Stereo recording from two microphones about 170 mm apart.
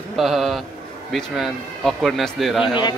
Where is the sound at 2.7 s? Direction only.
25° left (ahead or behind).